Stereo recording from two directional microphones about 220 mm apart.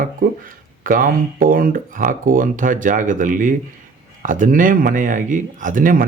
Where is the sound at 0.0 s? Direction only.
40° right (ahead or behind).